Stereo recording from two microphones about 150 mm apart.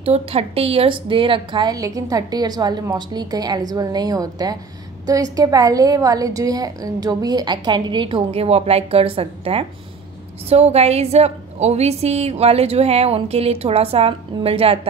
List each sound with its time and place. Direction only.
0.0 s a woman's voice: 40° right (ahead or behind)